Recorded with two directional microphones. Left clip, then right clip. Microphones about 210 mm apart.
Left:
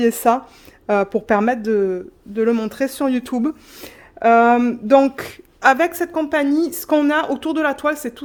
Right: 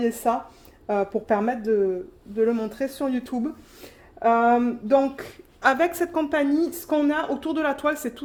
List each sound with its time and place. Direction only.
0.0 s speech: 45° left (ahead or behind)
5.6 s a woman's voice: 30° left (ahead or behind)